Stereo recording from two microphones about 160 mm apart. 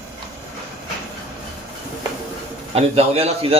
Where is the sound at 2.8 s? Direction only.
40° right (ahead or behind).